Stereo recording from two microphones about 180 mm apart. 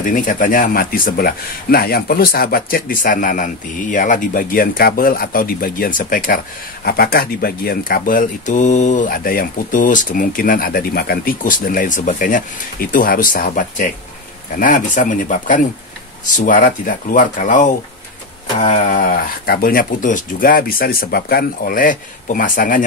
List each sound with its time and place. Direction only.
0.0 s speech: 50° left (ahead or behind)